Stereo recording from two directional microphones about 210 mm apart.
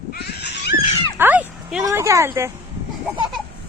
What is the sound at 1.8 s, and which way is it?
Speech, 15° right (ahead or behind).